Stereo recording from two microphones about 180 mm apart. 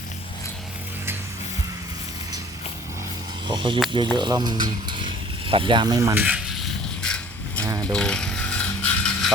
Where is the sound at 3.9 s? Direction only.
25° right (ahead or behind); by 7.7 s 5° left (ahead or behind).